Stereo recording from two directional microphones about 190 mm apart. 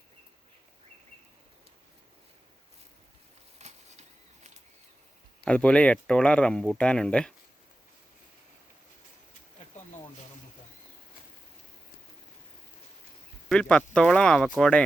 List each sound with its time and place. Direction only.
3.6 s a sound: 35° right (ahead or behind)
5.5 s speech: 5° left (ahead or behind)
13.5 s speech: 5° left (ahead or behind)